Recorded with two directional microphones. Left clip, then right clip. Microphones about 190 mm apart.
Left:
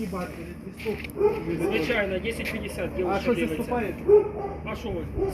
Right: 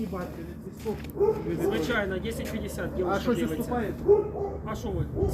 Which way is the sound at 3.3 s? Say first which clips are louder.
Left 3 dB; 5° right (ahead or behind).